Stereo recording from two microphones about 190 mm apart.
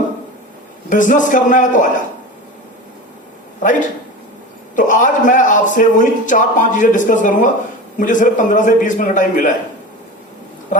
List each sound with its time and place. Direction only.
0.9 s a man's voice: 40° left (ahead or behind)
3.6 s a man's voice: 45° left (ahead or behind)